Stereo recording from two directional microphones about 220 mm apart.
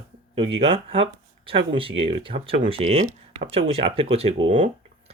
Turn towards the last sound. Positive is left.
turn(degrees=-25)  # may be behind; listen again after turning